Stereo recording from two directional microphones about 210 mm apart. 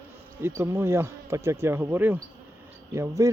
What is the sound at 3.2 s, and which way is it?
Speech, 15° right (ahead or behind).